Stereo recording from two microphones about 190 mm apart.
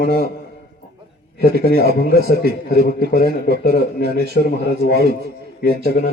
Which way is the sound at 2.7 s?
50° left (ahead or behind).